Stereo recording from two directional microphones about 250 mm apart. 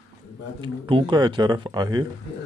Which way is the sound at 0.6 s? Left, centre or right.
Centre.